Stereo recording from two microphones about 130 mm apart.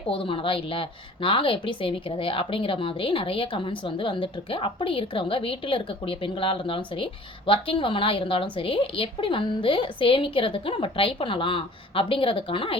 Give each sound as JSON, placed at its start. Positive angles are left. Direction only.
{"t": 0.1, "sound": "speech", "side_deg": 40}